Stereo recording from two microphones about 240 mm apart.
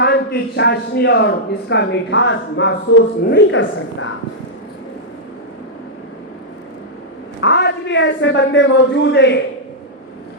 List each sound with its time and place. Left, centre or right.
0.0 s a man's voice: left
7.4 s a man's voice: left